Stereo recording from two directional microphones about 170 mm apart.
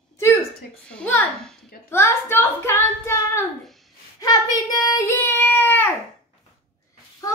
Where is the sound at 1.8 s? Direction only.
15° left (ahead or behind).